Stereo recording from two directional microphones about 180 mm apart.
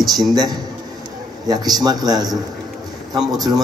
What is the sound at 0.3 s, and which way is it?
A man's voice, 20° right (ahead or behind).